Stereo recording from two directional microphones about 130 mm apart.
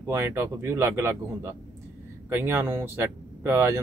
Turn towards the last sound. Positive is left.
turn(degrees=-20)  # may be behind; listen again after turning